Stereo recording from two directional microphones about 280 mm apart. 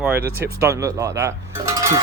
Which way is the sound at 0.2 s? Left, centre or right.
Right.